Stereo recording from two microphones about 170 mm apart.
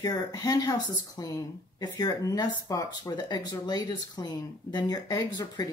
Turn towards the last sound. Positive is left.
turn(degrees=25)  # may be behind; listen again after turning